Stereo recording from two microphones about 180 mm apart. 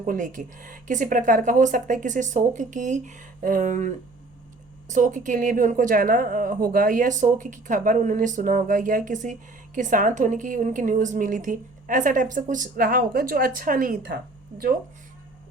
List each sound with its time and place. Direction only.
0.0 s a woman's voice: 50° right (ahead or behind)